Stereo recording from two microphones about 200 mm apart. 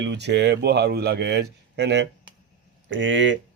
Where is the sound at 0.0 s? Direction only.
60° right (ahead or behind).